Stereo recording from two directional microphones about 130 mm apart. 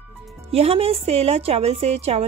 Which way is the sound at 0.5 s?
50° right (ahead or behind).